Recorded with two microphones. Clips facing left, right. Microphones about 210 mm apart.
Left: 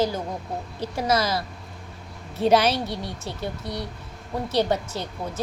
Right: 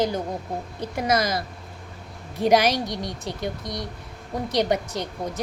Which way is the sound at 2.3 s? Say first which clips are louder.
Even; 15° right (ahead or behind).